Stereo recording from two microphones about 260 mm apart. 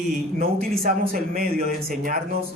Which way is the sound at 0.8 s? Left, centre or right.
Right.